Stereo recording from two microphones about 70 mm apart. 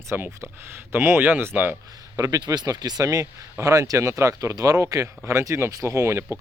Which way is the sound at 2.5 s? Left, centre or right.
Right.